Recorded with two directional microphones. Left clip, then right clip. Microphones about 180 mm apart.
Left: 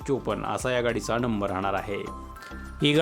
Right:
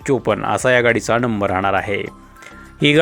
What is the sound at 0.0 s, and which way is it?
Speech, 30° right (ahead or behind).